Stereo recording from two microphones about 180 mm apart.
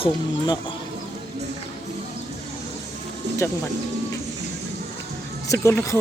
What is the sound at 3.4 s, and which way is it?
Speech, 15° left (ahead or behind).